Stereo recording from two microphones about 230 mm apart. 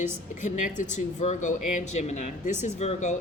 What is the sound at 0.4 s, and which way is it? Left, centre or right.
Speech, left.